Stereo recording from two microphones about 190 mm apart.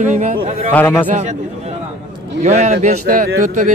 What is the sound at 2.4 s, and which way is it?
Speech, 35° right (ahead or behind).